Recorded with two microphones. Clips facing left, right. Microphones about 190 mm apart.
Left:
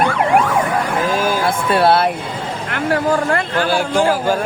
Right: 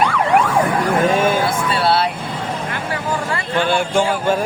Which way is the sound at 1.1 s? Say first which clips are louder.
Right 2 dB; centre (ahead or behind).